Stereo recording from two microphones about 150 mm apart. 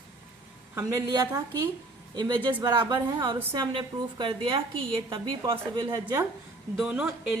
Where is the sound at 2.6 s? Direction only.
25° right (ahead or behind).